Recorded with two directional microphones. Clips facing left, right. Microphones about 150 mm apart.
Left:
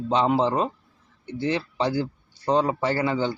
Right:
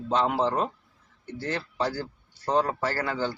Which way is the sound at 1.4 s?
15° left (ahead or behind).